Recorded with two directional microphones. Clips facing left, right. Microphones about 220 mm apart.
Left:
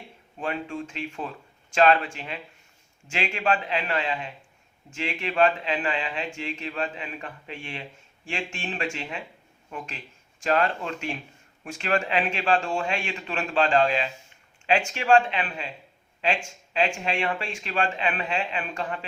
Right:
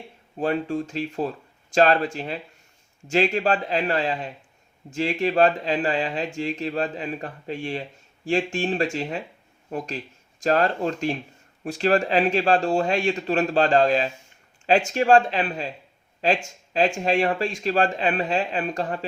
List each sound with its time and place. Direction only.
0.3 s speech: 35° right (ahead or behind)